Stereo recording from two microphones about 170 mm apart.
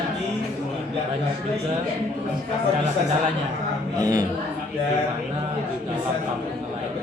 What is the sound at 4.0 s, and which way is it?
Speech, 20° right (ahead or behind).